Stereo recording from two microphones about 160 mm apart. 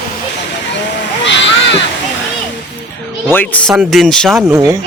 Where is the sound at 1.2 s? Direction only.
90° left.